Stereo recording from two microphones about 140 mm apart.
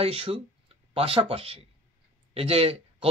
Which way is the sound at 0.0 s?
40° right (ahead or behind).